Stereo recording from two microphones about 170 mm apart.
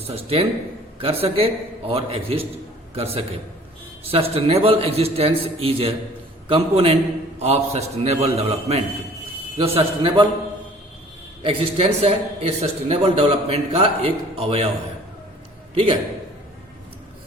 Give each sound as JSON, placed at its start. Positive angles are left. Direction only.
{"t": 0.1, "sound": "a man's voice", "side_deg": -35}
{"t": 11.4, "sound": "a man's voice", "side_deg": -35}
{"t": 15.7, "sound": "a man's voice", "side_deg": -35}